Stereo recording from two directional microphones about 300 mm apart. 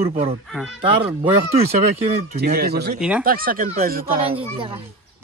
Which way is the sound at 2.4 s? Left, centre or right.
Right.